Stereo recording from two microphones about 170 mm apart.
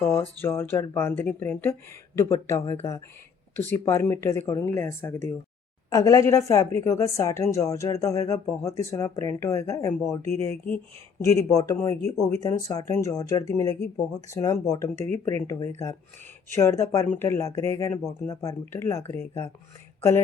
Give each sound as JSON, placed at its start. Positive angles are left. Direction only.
{"t": 0.0, "sound": "speech", "side_deg": 15}
{"t": 14.9, "sound": "speech", "side_deg": -40}
{"t": 15.4, "sound": "speech", "side_deg": 15}